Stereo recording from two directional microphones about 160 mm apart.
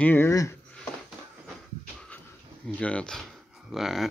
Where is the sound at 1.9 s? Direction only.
5° left (ahead or behind).